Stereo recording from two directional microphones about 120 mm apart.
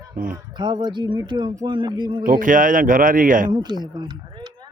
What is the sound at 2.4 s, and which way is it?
Speech, 90° right.